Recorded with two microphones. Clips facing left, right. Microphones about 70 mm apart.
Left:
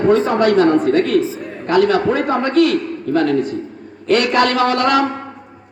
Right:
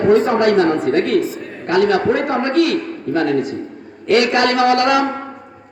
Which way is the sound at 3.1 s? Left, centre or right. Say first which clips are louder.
Left 1 dB; centre.